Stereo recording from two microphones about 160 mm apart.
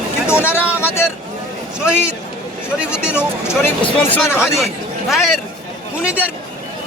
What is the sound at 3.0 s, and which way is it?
Speech, 5° right (ahead or behind).